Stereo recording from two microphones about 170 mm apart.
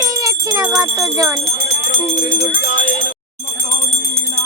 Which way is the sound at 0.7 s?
20° right (ahead or behind).